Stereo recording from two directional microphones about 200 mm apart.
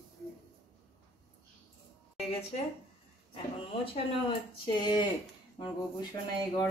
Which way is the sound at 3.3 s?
25° left (ahead or behind).